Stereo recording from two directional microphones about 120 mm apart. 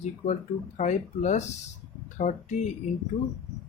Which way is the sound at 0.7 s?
80° left.